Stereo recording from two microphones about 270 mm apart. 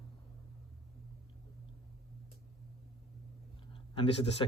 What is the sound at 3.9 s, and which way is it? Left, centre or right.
Speech, left.